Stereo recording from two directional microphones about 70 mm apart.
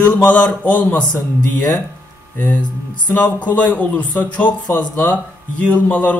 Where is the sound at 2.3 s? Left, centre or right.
Left.